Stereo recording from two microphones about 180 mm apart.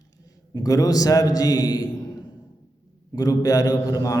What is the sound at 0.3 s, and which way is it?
A man's voice, 20° left (ahead or behind).